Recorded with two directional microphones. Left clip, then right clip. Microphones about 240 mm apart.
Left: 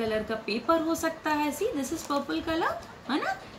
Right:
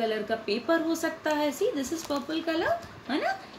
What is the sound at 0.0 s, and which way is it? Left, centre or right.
Speech, centre.